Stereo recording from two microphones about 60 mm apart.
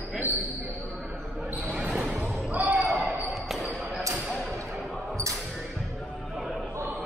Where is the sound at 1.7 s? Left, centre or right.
Right.